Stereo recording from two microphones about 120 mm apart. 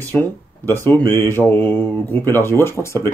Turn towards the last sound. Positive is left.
turn(degrees=25)  # may be behind; listen again after turning